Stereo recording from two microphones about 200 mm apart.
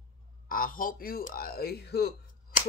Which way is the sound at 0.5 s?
45° left (ahead or behind).